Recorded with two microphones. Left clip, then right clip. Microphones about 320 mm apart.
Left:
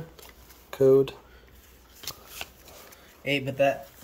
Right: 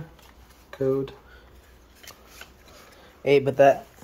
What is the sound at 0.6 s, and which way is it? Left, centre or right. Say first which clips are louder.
Speech: left 6 dB; left.